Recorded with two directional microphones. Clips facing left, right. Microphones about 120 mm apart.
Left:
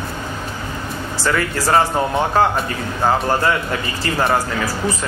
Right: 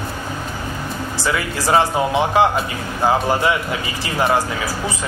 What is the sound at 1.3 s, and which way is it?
Speech, 10° right (ahead or behind).